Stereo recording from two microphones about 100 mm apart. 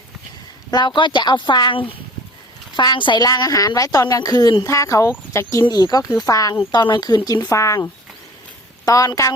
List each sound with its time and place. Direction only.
0.7 s a woman's voice: 50° left (ahead or behind)
2.7 s a woman's voice: 50° left (ahead or behind)
4.6 s speech: 30° left (ahead or behind)
5.6 s a woman's voice: 40° left (ahead or behind)
7.5 s speech: 30° left (ahead or behind)
8.8 s speech: 40° left (ahead or behind)